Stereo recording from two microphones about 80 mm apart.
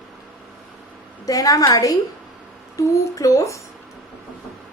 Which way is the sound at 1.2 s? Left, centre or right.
Left.